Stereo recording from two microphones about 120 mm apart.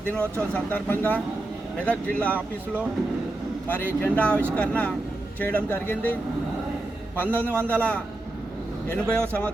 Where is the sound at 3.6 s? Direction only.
10° left (ahead or behind).